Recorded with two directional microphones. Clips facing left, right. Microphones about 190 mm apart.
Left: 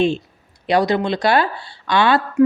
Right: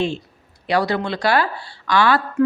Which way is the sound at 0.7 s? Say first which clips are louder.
Left 3 dB; 20° left (ahead or behind).